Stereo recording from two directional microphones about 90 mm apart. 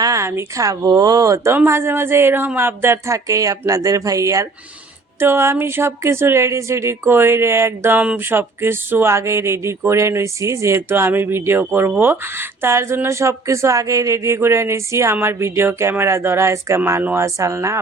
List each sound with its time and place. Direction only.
0.0 s speech: 35° right (ahead or behind)
1.5 s speech: 30° right (ahead or behind)